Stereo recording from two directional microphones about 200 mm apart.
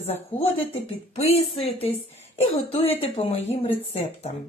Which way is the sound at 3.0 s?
30° left (ahead or behind).